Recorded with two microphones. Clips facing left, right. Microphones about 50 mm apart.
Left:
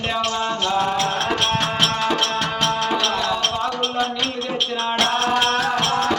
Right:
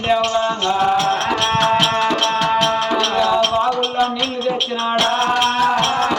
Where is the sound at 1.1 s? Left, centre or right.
Right.